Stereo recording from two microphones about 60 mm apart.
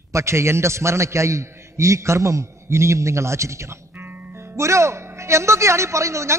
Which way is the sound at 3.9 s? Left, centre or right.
Right.